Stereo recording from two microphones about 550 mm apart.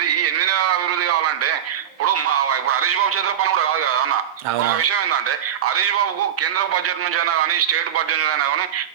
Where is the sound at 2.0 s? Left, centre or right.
Right.